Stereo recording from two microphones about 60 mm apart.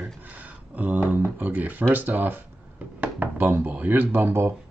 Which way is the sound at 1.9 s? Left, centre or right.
Right.